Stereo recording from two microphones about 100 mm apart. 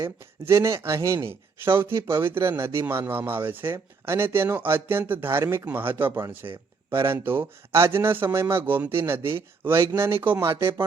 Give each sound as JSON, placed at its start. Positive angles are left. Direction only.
{"t": 0.0, "sound": "speech", "side_deg": -30}